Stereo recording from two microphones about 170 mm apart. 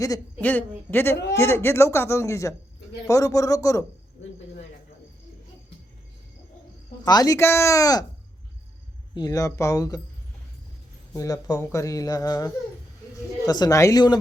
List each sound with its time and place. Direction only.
0.0 s a man's voice: 15° left (ahead or behind)
7.0 s speech: 20° left (ahead or behind)
9.1 s speech: 20° left (ahead or behind)
11.1 s speech: 20° left (ahead or behind)